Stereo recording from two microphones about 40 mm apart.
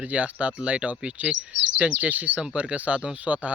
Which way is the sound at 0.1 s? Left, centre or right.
Right.